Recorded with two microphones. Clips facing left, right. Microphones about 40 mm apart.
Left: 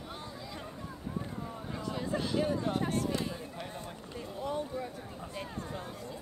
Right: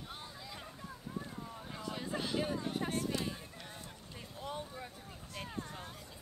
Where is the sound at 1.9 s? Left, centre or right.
Centre.